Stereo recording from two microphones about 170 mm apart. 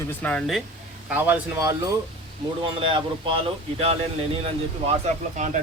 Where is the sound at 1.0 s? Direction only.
10° right (ahead or behind).